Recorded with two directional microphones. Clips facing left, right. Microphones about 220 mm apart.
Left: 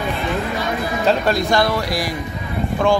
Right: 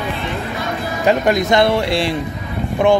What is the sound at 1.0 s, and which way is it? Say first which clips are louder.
Speech: right 3 dB; 15° right (ahead or behind).